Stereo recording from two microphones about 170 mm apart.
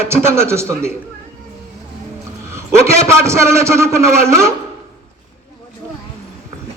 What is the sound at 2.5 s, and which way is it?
A man's voice, 15° right (ahead or behind).